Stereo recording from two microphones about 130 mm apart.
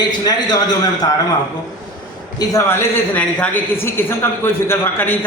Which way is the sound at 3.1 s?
10° left (ahead or behind).